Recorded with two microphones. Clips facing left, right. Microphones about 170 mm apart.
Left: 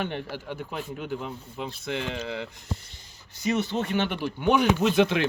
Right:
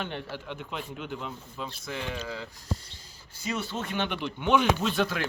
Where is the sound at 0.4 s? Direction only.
45° left (ahead or behind); by 2.5 s 65° left (ahead or behind).